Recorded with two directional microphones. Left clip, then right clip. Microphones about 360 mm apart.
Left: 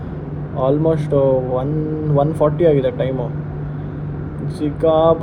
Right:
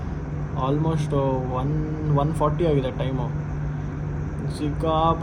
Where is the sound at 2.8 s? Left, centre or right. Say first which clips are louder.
Left 9 dB; right.